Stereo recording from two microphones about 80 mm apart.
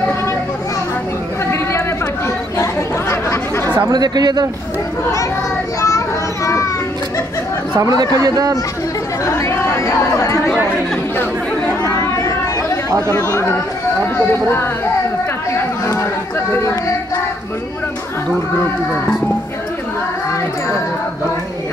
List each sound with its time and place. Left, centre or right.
1.4 s chatter: left
3.7 s speech: right
5.8 s children playing: left
7.8 s speech: right
9.2 s speech: left
11.8 s chatter: left
14.1 s speech: left
15.8 s chatter: left
16.5 s a sound: left